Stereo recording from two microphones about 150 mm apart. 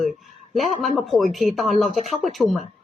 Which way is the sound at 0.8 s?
Centre (ahead or behind).